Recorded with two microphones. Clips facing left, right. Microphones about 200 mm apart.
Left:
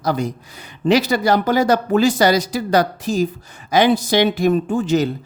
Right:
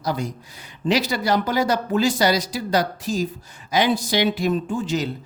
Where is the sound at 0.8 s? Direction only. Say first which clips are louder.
Left 6 dB; 55° left (ahead or behind).